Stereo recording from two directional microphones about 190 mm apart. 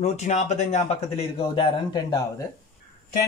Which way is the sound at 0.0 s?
35° left (ahead or behind).